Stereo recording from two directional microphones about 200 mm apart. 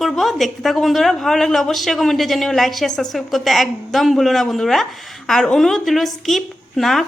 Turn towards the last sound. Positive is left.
turn(degrees=0)  # may be behind; listen again after turning